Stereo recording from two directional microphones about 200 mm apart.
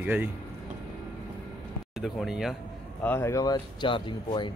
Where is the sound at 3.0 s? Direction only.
10° left (ahead or behind).